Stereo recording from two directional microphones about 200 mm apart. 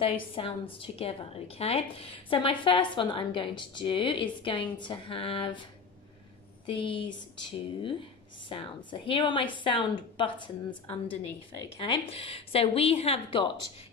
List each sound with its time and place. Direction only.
0.0 s a woman's voice: 30° left (ahead or behind)